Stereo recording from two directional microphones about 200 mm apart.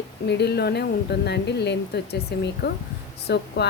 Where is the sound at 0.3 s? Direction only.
55° left (ahead or behind).